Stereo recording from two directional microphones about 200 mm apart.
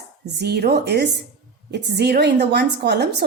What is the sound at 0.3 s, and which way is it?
A woman's voice, 55° right (ahead or behind).